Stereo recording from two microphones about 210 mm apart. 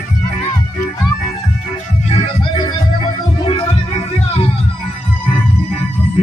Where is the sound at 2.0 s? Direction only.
30° left (ahead or behind).